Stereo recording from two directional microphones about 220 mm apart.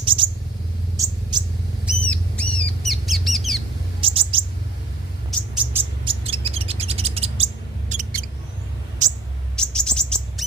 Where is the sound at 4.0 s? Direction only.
25° right (ahead or behind).